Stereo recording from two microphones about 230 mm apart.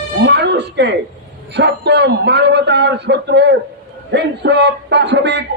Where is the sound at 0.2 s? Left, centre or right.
Right.